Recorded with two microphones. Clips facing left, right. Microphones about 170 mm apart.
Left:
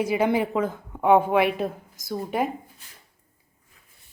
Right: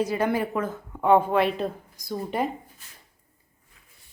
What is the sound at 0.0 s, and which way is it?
A woman's voice, 15° left (ahead or behind).